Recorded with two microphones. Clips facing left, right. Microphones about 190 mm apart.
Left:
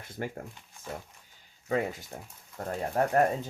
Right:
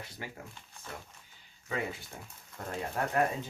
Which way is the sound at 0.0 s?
50° left (ahead or behind).